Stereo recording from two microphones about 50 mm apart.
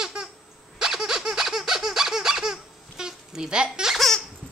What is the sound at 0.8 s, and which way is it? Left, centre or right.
Squeak, centre.